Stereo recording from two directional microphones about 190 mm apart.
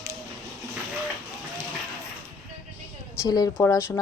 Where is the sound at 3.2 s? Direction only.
20° left (ahead or behind).